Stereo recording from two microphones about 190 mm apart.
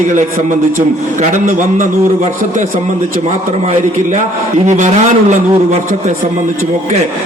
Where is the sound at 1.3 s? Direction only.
40° right (ahead or behind).